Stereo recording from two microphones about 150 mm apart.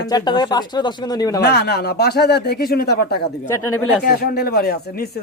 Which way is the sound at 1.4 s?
90° left.